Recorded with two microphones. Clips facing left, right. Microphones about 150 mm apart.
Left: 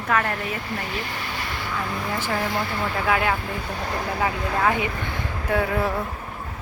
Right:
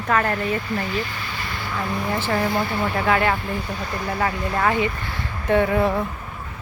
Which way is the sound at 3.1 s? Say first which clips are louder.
Right 2 dB; 5° left (ahead or behind).